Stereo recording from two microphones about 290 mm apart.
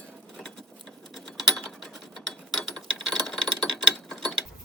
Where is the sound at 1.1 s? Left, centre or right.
Centre.